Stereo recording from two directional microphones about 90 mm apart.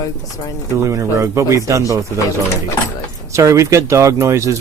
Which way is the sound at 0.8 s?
35° right (ahead or behind).